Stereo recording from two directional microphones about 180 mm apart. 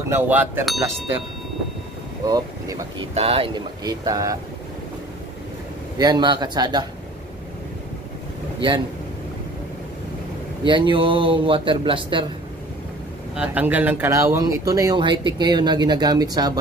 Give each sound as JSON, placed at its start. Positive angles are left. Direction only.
{"t": 0.1, "sound": "speech", "side_deg": -10}
{"t": 2.2, "sound": "speech", "side_deg": -20}
{"t": 3.2, "sound": "speech", "side_deg": -30}
{"t": 5.9, "sound": "speech", "side_deg": -25}
{"t": 8.5, "sound": "speech", "side_deg": -25}
{"t": 10.6, "sound": "speech", "side_deg": -25}
{"t": 13.4, "sound": "speech", "side_deg": -10}